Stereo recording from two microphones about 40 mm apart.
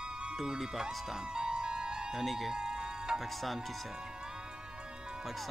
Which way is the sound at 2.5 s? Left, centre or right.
Centre.